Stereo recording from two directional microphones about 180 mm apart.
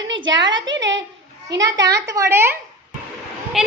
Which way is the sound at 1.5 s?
80° right.